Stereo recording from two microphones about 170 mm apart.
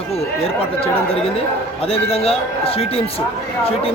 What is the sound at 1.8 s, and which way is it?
A man's voice, 35° left (ahead or behind).